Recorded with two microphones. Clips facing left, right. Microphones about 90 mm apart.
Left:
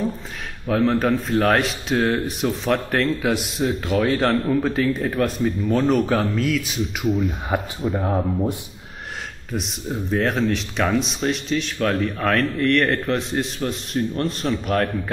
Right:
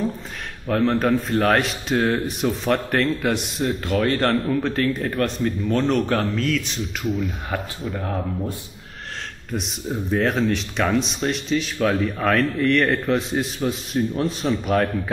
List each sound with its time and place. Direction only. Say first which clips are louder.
0.7 s a man's voice: even; centre (ahead or behind)
8.0 s speech: left 4 dB; 20° left (ahead or behind)
9.5 s a man's voice: even; centre (ahead or behind)